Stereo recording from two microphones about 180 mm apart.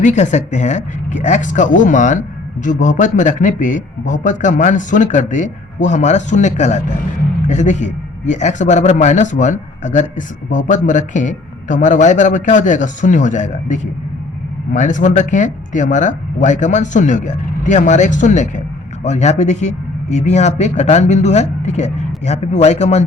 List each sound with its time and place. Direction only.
0.0 s speech: 40° left (ahead or behind)